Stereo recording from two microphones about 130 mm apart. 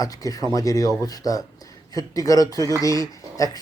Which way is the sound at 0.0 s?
25° left (ahead or behind).